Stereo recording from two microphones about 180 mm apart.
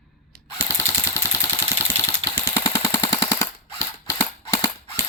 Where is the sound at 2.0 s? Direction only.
20° left (ahead or behind).